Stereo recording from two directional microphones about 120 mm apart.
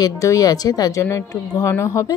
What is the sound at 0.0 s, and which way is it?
A woman's voice, 30° left (ahead or behind).